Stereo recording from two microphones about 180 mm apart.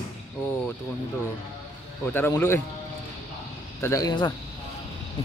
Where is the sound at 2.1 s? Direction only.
10° left (ahead or behind).